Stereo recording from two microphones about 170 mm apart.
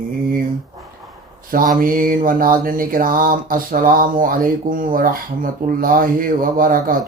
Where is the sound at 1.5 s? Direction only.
55° right (ahead or behind).